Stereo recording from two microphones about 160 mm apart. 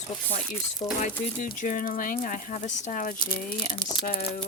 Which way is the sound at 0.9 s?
50° left (ahead or behind).